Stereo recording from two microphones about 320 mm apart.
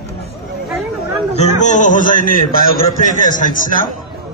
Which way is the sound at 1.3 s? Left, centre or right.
Left.